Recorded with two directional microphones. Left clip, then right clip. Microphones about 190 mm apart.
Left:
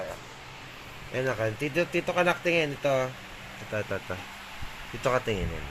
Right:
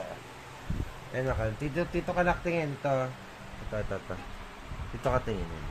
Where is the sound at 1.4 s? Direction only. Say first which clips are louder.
Left 5 dB; 10° left (ahead or behind).